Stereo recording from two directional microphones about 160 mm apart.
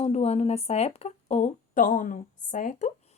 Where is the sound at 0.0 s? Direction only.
40° left (ahead or behind).